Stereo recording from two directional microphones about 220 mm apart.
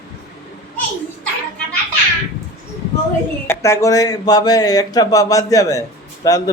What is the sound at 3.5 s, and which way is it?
Speech, 15° left (ahead or behind).